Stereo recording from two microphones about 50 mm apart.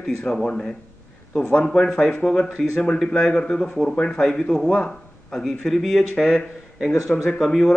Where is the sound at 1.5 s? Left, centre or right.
Centre.